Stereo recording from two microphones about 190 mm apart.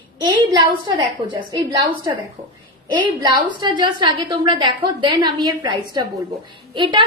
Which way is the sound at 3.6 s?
25° right (ahead or behind).